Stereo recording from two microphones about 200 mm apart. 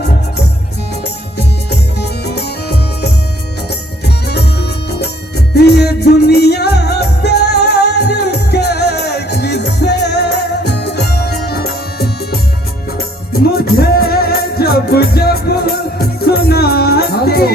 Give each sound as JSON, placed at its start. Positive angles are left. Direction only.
{"t": 2.0, "sound": "music", "side_deg": 55}